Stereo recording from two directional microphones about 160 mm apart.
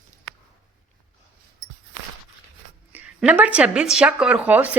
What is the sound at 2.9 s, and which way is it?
A woman's voice, 10° right (ahead or behind).